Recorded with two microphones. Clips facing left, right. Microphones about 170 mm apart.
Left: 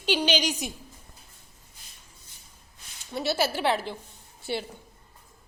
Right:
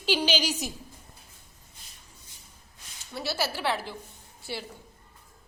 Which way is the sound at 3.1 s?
20° left (ahead or behind).